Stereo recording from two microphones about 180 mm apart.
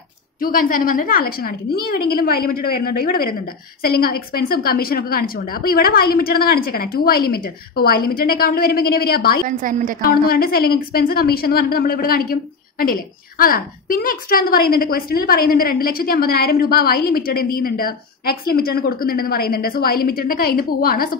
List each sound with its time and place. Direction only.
0.4 s a woman's voice: 50° left (ahead or behind)
9.5 s a woman's voice: 50° right (ahead or behind)
10.2 s a woman's voice: 55° left (ahead or behind)